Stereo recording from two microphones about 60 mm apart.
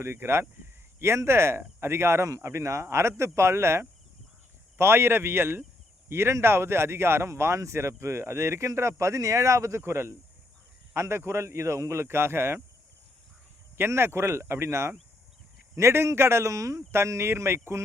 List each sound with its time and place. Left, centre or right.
0.0 s speech: right
13.7 s speech: right